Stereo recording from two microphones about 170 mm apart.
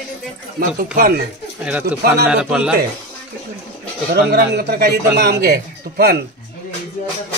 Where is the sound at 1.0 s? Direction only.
65° right (ahead or behind).